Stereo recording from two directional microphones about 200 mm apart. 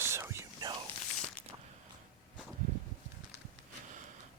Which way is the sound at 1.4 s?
5° left (ahead or behind).